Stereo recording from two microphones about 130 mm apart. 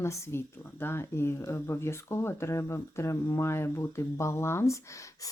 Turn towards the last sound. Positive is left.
turn(degrees=20)  # may be behind; listen again after turning